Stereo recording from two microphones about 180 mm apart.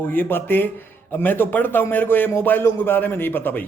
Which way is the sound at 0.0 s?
10° left (ahead or behind).